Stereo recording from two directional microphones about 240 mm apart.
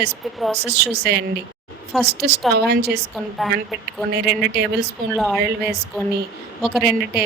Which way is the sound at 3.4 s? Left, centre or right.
Centre.